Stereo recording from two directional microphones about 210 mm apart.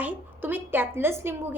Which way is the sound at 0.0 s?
10° right (ahead or behind).